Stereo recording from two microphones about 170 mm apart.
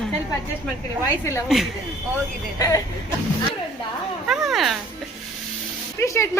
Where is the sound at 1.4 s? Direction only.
Centre (ahead or behind).